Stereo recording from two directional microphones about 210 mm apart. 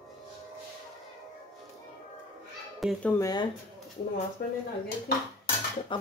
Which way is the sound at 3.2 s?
20° left (ahead or behind).